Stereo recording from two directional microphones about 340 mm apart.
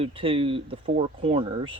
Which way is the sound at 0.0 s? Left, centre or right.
Centre.